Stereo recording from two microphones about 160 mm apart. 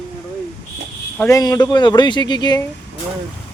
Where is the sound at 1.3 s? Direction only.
20° left (ahead or behind).